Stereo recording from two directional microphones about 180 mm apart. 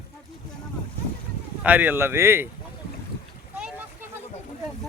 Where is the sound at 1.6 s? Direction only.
10° right (ahead or behind).